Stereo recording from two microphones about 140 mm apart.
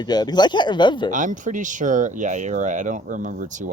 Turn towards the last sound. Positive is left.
turn(degrees=-60)  # may be behind; listen again after turning